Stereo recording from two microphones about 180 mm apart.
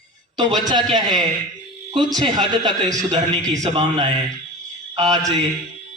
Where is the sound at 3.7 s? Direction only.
25° right (ahead or behind).